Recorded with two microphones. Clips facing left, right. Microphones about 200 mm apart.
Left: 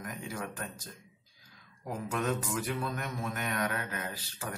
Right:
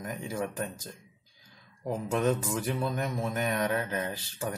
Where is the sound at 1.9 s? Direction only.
25° right (ahead or behind).